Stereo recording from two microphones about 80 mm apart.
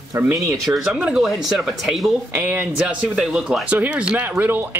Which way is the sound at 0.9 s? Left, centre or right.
Centre.